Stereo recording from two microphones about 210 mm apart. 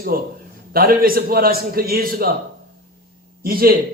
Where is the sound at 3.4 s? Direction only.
45° right (ahead or behind).